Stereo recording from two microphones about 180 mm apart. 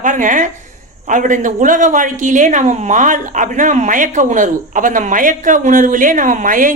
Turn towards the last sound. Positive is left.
turn(degrees=-45)  # may be behind; listen again after turning